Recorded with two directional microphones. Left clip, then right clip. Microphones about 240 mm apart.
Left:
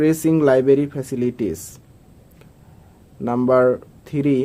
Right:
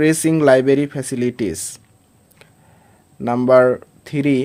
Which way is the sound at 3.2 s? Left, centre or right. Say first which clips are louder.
Right 3 dB; right.